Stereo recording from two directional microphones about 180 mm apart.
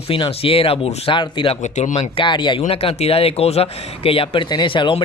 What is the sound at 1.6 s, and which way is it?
Speech, 40° left (ahead or behind).